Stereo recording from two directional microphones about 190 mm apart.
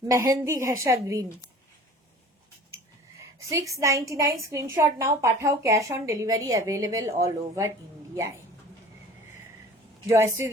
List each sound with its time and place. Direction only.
0.1 s a woman's voice: 15° right (ahead or behind)
3.2 s a woman's voice: 15° right (ahead or behind)
10.1 s a woman's voice: 15° right (ahead or behind)